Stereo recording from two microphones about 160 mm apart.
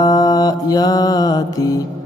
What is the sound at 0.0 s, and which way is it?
Mantra, 25° left (ahead or behind).